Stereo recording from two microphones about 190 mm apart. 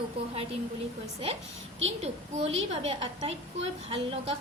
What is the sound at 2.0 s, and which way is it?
A woman's voice, 30° right (ahead or behind).